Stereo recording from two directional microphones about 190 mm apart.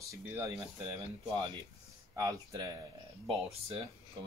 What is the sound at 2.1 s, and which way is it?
Speech, 20° right (ahead or behind).